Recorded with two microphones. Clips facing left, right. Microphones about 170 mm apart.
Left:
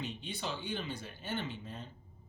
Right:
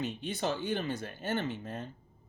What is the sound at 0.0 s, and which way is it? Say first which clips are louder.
Speech: right 7 dB; 45° right (ahead or behind).